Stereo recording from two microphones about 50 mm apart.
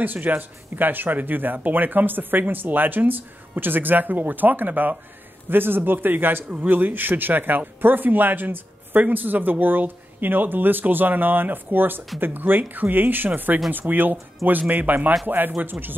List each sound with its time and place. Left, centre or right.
0.0 s a man's voice: right